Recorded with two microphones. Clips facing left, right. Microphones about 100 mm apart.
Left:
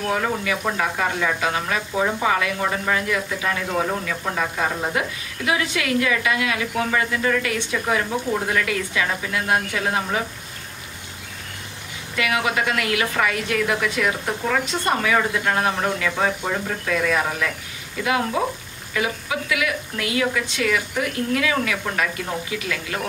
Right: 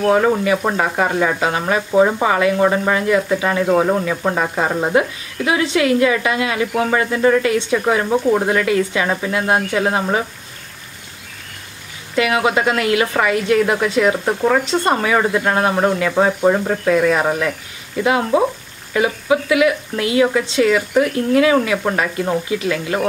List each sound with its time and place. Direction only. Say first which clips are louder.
0.1 s speech: right 8 dB; 35° right (ahead or behind)
12.2 s speech: right 6 dB; 25° right (ahead or behind)